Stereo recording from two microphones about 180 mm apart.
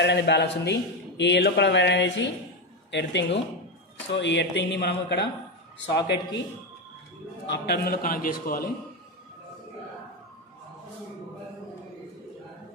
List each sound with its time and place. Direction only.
0.0 s a man's voice: 70° left (ahead or behind)
7.4 s a man's voice: 70° left (ahead or behind); by 8.6 s 50° left (ahead or behind)